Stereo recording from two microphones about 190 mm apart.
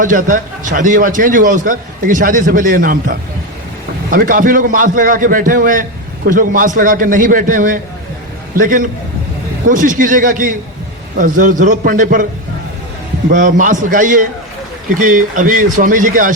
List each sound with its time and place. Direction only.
0.0 s a man's voice: 45° right (ahead or behind)
13.3 s a man's voice: 45° right (ahead or behind)